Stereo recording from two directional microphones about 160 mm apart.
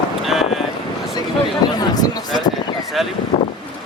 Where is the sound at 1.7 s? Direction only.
25° left (ahead or behind).